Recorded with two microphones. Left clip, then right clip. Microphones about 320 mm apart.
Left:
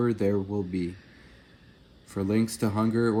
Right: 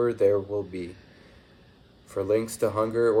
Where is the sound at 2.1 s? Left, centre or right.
Left.